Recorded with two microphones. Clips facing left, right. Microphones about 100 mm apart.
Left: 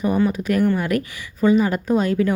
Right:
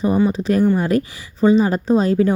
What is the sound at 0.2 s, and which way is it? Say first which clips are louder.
A woman's voice: right 2 dB; 25° right (ahead or behind).